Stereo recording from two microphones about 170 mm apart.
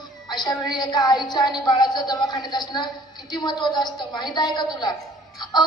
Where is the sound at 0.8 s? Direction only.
25° left (ahead or behind).